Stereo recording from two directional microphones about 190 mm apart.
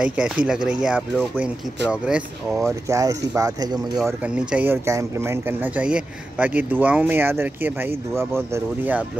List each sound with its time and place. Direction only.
0.0 s speech: 5° right (ahead or behind)
2.9 s speech: 15° right (ahead or behind)
4.0 s speech: 5° right (ahead or behind)